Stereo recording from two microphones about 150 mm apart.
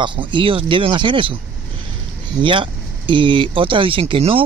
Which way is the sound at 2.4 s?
35° right (ahead or behind).